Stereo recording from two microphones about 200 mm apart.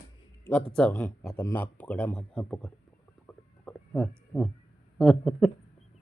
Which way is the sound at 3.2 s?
5° left (ahead or behind).